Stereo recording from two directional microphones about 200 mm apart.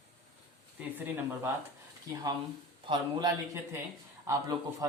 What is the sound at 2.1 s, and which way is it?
A man's voice, 20° right (ahead or behind).